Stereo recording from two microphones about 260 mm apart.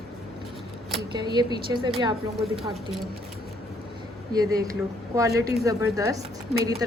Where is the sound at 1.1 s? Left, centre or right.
Centre.